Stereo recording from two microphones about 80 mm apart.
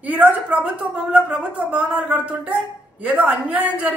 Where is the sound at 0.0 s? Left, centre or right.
Centre.